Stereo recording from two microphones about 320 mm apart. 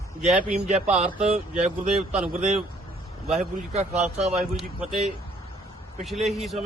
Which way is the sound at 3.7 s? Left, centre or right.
Right.